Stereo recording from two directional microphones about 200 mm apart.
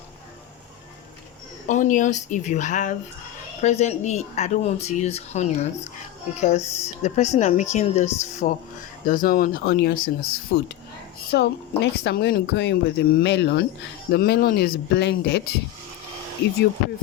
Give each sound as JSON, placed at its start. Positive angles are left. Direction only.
{"t": 1.6, "sound": "speech", "side_deg": 40}